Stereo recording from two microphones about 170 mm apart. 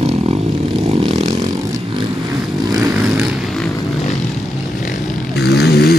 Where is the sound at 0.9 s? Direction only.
40° right (ahead or behind).